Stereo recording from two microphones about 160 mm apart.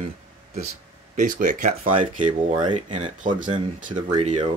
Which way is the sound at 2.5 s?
30° right (ahead or behind).